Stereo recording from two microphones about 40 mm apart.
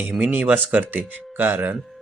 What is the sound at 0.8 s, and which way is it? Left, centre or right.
Speech, right.